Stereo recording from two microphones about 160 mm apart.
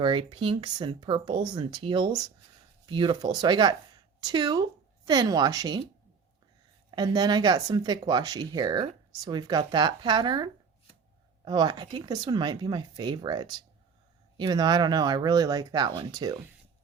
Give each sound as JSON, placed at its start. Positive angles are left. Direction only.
{"t": 0.0, "sound": "speech", "side_deg": -30}
{"t": 6.9, "sound": "speech", "side_deg": -25}